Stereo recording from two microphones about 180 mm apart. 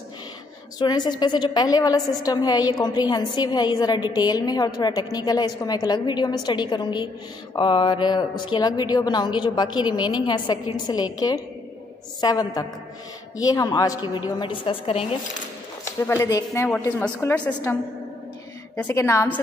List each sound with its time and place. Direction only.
0.7 s a woman's voice: 25° left (ahead or behind)
15.8 s a woman's voice: 15° left (ahead or behind)